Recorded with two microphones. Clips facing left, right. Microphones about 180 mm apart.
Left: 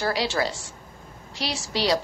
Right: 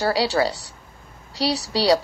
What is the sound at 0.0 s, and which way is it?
A woman's voice, 35° right (ahead or behind).